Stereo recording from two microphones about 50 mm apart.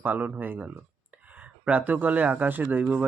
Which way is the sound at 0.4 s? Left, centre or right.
Right.